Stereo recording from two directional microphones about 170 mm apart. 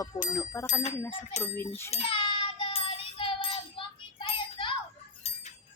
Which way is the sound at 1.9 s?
35° left (ahead or behind).